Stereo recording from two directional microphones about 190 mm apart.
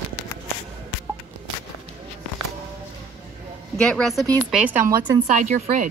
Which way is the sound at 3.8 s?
5° left (ahead or behind).